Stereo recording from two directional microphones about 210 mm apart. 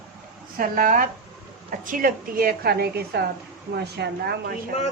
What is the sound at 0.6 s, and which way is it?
A woman's voice, 45° right (ahead or behind).